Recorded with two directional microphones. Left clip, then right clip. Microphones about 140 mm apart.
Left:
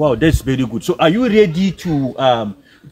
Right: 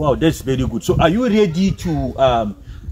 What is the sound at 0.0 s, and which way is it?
A man's voice, 25° left (ahead or behind).